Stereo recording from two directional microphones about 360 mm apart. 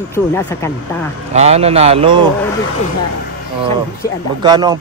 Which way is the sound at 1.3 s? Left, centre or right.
Centre.